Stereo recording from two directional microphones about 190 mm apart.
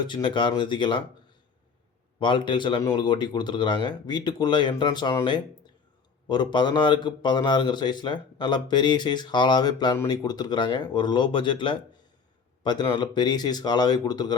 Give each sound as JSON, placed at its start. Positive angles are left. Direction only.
{"t": 0.1, "sound": "a man's voice", "side_deg": 25}
{"t": 2.1, "sound": "a man's voice", "side_deg": 25}